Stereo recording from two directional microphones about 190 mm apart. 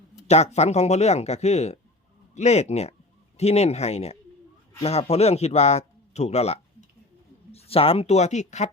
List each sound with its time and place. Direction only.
0.3 s speech: 35° left (ahead or behind)